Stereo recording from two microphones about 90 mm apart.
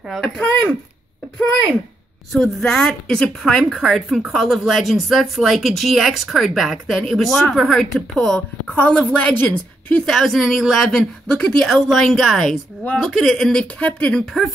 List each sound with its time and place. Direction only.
0.1 s a woman's voice: 5° left (ahead or behind)
2.3 s a woman's voice: 5° left (ahead or behind)
8.6 s a woman's voice: 15° left (ahead or behind)
9.8 s a woman's voice: 5° left (ahead or behind)